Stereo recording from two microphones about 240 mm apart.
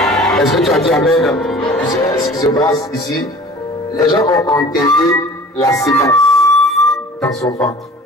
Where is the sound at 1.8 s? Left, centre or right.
Centre.